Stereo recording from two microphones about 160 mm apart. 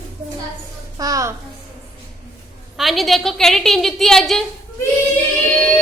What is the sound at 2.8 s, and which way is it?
A woman's voice, centre (ahead or behind).